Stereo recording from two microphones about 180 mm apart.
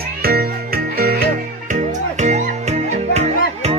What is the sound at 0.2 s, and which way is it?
Music, 60° right (ahead or behind).